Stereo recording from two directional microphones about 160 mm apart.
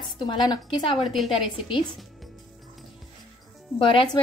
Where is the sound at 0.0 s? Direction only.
30° left (ahead or behind).